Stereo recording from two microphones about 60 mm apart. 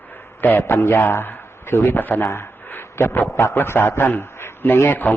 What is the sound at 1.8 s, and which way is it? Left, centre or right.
Speech, left.